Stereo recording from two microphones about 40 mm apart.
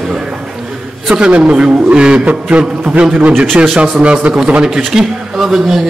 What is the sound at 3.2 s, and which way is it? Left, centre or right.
Speech, right.